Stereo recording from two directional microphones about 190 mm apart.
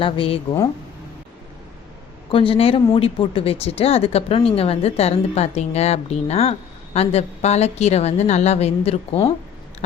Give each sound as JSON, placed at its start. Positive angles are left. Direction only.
{"t": 0.0, "sound": "a woman's voice", "side_deg": 30}
{"t": 2.3, "sound": "speech", "side_deg": 30}